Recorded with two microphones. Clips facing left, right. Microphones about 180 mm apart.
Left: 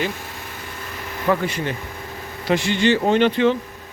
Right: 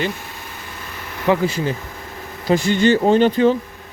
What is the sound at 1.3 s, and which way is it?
Speech, 30° right (ahead or behind).